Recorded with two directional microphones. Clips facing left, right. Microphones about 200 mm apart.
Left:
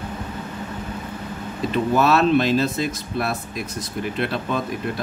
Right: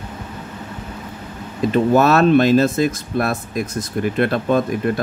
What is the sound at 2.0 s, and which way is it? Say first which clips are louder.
Speech: right 3 dB; 50° right (ahead or behind).